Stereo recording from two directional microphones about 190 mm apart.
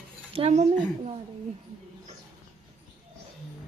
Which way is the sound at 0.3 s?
30° right (ahead or behind).